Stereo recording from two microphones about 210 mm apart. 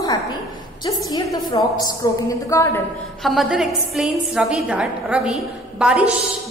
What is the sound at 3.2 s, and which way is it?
A woman's voice, centre (ahead or behind).